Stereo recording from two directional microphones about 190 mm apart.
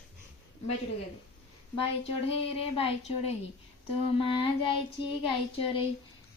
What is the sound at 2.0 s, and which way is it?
A woman's voice, 30° left (ahead or behind).